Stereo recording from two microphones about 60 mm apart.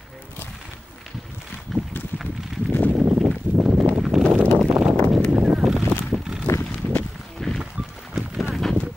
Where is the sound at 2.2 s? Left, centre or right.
Centre.